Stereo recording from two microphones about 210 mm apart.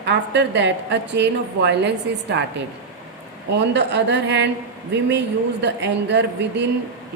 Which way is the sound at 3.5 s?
55° right (ahead or behind).